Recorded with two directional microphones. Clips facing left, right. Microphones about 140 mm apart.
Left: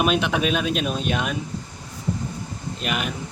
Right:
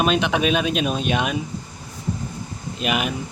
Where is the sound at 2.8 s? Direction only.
10° right (ahead or behind).